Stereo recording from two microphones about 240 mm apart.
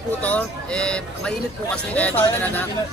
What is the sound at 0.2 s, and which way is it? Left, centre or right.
Speech, centre.